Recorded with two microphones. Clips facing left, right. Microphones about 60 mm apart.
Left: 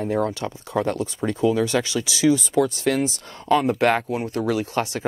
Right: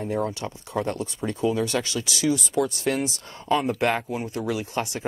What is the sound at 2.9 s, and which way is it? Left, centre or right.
Speech, left.